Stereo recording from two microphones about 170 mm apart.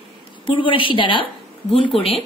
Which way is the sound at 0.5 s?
30° left (ahead or behind).